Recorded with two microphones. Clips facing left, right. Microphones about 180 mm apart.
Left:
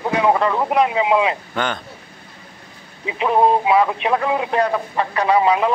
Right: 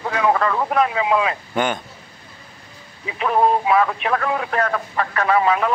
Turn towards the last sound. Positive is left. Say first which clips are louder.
# left 2 dB
turn(degrees=15)  # may be behind; listen again after turning